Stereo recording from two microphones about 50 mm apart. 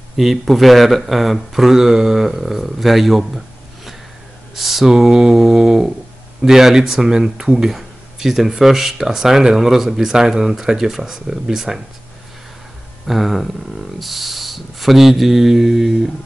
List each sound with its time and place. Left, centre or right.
0.2 s speech: centre
13.0 s speech: centre